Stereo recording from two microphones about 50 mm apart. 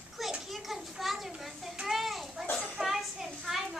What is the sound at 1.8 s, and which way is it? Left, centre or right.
Children playing, centre.